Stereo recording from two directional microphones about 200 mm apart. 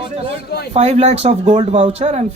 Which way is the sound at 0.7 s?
30° right (ahead or behind).